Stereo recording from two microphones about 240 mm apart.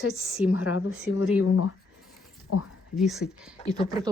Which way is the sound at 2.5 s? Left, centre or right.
Left.